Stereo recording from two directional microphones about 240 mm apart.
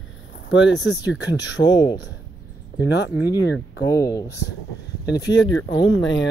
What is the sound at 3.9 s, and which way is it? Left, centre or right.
Speech, centre.